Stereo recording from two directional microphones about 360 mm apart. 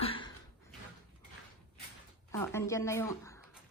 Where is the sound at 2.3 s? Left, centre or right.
Centre.